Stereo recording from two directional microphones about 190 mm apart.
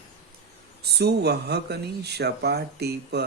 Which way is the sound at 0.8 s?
60° right (ahead or behind).